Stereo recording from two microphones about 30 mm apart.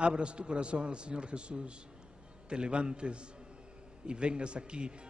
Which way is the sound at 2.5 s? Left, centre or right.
Right.